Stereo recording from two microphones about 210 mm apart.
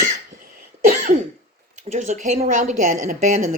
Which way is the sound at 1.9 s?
35° right (ahead or behind).